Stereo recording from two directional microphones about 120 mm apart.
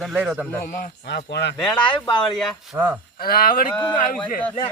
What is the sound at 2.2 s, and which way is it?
Speech, 5° left (ahead or behind).